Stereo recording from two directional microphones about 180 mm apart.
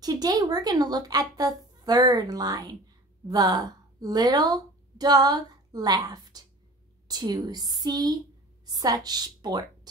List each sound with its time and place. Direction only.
0.0 s a woman's voice: 20° right (ahead or behind)